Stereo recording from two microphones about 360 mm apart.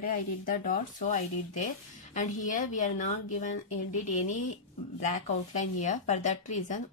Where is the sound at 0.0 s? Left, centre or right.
Left.